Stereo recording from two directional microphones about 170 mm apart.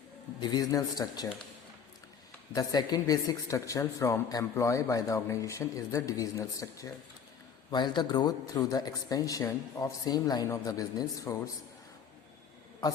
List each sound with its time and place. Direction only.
0.3 s speech: 25° left (ahead or behind)
2.6 s speech: 20° left (ahead or behind)